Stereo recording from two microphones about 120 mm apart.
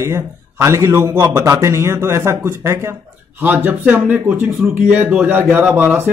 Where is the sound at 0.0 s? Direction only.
25° right (ahead or behind).